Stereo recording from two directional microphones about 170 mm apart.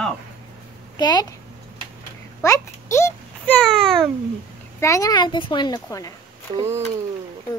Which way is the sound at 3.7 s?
Centre (ahead or behind).